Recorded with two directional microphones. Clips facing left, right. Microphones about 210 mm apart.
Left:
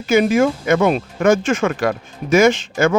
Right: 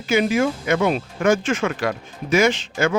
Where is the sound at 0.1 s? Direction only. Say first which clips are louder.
Left 4 dB; 45° left (ahead or behind).